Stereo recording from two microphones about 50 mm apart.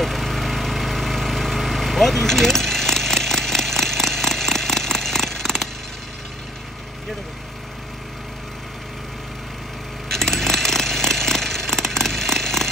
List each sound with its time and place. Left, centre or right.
0.0 s vehicle: centre
10.0 s chainsaw: centre